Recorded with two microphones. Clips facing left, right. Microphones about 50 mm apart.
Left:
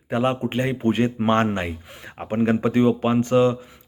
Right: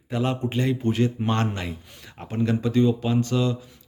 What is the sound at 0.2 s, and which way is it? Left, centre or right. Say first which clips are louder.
Speech: left 3 dB; left.